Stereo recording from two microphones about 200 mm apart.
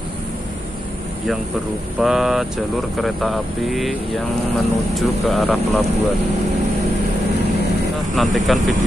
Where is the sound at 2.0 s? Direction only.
Centre (ahead or behind).